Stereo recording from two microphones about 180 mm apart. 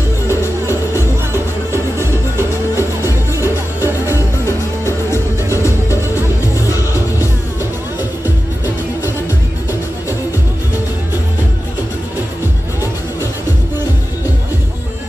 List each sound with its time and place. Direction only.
0.3 s music: 15° left (ahead or behind)
0.9 s music: 15° right (ahead or behind)
4.8 s music: 15° left (ahead or behind)